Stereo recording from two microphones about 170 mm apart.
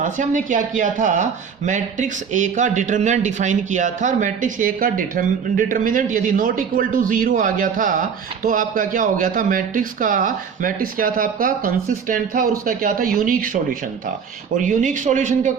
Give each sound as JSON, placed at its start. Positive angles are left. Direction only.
{"t": 0.0, "sound": "speech", "side_deg": -50}